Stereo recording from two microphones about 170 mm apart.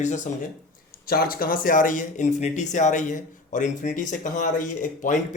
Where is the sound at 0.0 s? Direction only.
45° left (ahead or behind).